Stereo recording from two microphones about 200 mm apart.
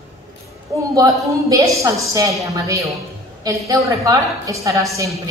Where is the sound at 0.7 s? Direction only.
15° right (ahead or behind).